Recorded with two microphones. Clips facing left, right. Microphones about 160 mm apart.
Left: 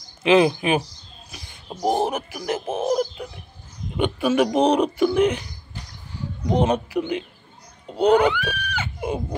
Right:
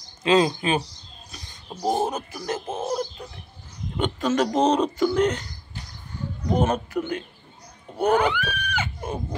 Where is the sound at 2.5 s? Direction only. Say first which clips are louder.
Left 4 dB; 10° left (ahead or behind).